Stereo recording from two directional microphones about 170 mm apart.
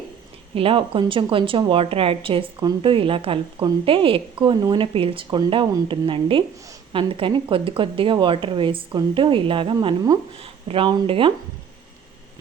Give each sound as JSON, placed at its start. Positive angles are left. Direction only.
{"t": 0.5, "sound": "a woman's voice", "side_deg": -30}